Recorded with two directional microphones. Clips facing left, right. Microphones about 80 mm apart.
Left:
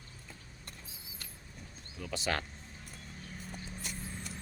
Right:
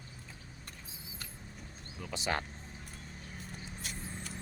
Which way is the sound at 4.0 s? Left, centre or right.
Right.